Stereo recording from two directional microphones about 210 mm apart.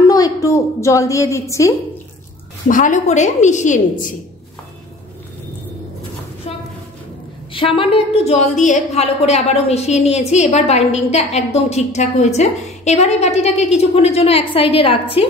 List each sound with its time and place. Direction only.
0.0 s a woman's voice: 15° left (ahead or behind)
2.7 s a woman's voice: 35° left (ahead or behind)
7.5 s a woman's voice: 25° left (ahead or behind)